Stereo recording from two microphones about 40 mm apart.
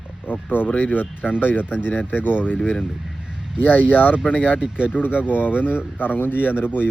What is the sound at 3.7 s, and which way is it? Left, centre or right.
Speech, left.